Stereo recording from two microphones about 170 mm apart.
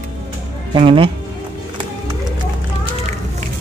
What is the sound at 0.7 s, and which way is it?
Speech, 30° right (ahead or behind).